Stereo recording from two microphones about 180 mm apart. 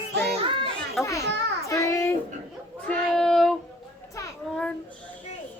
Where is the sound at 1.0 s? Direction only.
15° left (ahead or behind).